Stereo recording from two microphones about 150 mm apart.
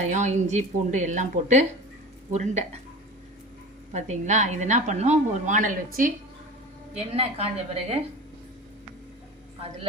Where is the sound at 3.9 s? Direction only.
50° right (ahead or behind).